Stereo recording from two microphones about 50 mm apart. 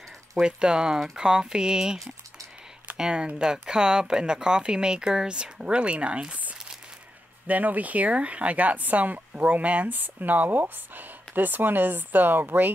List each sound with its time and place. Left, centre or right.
0.4 s speech: centre
3.0 s speech: centre; by 12.7 s right